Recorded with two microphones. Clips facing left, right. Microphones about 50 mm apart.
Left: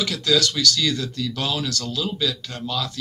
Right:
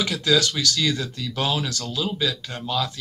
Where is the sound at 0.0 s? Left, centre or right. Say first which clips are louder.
Even; right.